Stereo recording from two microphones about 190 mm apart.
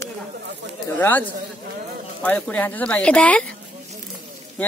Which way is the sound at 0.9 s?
10° left (ahead or behind).